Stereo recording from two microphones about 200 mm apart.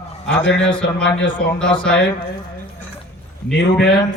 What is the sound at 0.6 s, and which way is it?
A man's voice, 5° left (ahead or behind).